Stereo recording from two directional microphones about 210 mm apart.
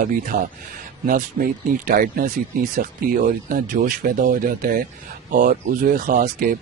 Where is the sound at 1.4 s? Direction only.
40° right (ahead or behind).